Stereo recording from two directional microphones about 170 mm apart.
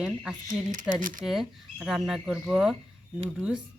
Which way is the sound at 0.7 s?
50° right (ahead or behind).